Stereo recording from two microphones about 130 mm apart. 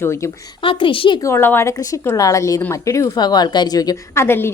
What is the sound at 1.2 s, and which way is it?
A woman's voice, 20° left (ahead or behind).